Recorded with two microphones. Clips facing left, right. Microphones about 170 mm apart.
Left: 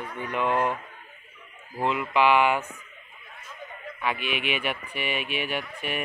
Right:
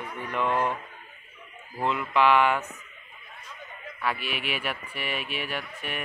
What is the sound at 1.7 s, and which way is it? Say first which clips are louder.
Speech: left 1 dB; 5° left (ahead or behind).